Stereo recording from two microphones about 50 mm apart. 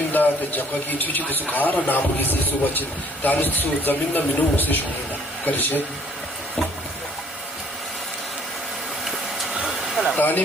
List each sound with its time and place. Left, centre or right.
0.1 s a man's voice: left
10.2 s speech: left